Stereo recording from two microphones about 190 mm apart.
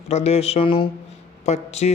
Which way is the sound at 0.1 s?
35° left (ahead or behind).